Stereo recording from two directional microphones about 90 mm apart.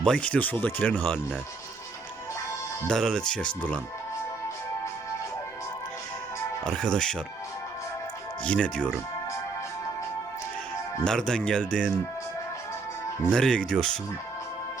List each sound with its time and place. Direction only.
0.0 s speech: 10° left (ahead or behind)
2.8 s speech: 5° left (ahead or behind)
6.7 s speech: 10° left (ahead or behind)
8.4 s speech: 10° left (ahead or behind)
11.0 s speech: 5° left (ahead or behind)
13.3 s speech: 10° left (ahead or behind)